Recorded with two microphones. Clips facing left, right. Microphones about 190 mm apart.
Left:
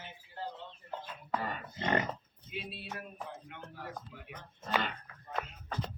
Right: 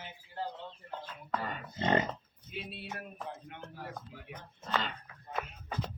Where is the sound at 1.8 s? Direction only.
25° right (ahead or behind).